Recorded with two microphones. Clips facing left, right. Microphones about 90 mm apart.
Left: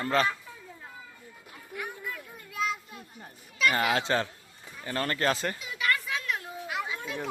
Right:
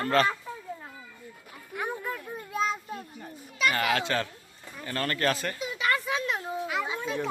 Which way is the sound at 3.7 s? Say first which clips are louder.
Left 1 dB; 20° left (ahead or behind).